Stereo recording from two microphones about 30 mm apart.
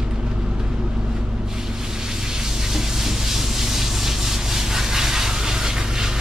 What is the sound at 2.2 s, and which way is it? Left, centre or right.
Steam, right.